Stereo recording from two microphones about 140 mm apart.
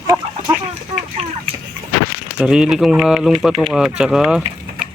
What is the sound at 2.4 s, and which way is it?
Speech, 5° right (ahead or behind).